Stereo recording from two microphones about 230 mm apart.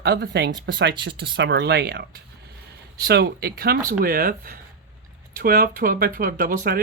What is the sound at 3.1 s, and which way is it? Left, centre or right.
Speech, right.